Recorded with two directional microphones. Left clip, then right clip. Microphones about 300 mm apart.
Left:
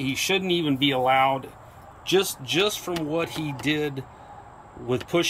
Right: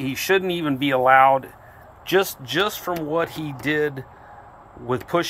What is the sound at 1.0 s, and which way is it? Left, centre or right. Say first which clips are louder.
Speech: right 8 dB; right.